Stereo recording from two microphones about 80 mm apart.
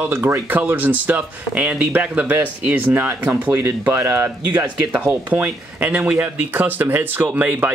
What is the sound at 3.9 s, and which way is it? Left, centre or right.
Speech, right.